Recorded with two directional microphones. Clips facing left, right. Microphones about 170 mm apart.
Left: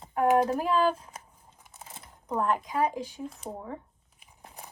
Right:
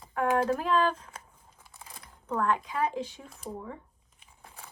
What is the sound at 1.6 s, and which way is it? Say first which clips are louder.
Crumpling: left 2 dB; 20° left (ahead or behind).